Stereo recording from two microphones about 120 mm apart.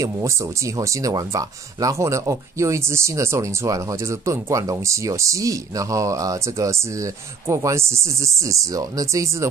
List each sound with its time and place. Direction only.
0.7 s speech: 30° right (ahead or behind)